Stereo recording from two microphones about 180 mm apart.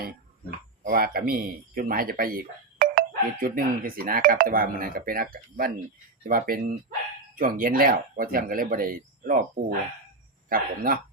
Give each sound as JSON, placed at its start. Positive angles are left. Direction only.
{"t": 0.8, "sound": "speech", "side_deg": -50}